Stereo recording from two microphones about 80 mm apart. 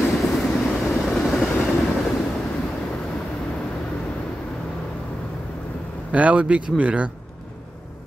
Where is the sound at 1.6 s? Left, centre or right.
Centre.